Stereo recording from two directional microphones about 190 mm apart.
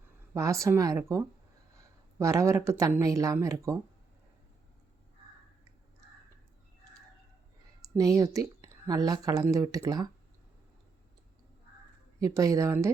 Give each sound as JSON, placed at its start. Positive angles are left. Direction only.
{"t": 0.3, "sound": "speech", "side_deg": -15}
{"t": 1.8, "sound": "a sound", "side_deg": -15}
{"t": 2.6, "sound": "speech", "side_deg": -15}
{"t": 7.9, "sound": "speech", "side_deg": -20}
{"t": 12.2, "sound": "speech", "side_deg": -15}